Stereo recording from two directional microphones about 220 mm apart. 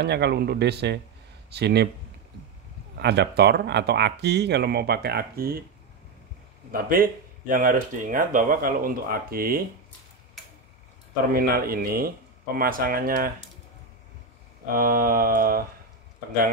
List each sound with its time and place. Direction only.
0.0 s speech: 50° right (ahead or behind)
3.0 s speech: 50° right (ahead or behind)
6.7 s speech: 40° right (ahead or behind)
11.3 s speech: 40° right (ahead or behind)
14.7 s speech: 40° right (ahead or behind)